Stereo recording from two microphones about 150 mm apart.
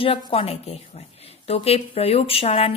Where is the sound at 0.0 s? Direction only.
40° left (ahead or behind).